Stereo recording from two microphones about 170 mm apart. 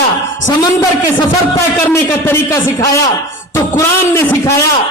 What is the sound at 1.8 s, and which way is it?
A man's voice, 10° left (ahead or behind).